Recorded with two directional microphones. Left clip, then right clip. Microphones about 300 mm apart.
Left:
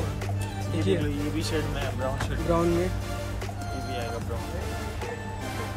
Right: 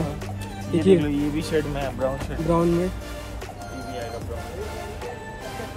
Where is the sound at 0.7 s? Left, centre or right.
Centre.